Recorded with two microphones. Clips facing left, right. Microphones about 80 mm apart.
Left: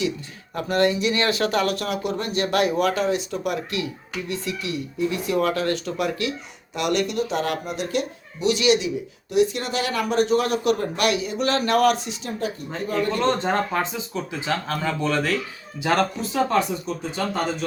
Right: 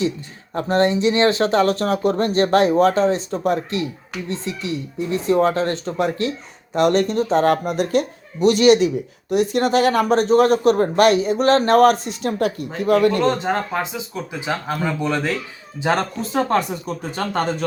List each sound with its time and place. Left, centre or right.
0.5 s speech: right
13.4 s speech: centre; by 16.0 s right
16.3 s speech: right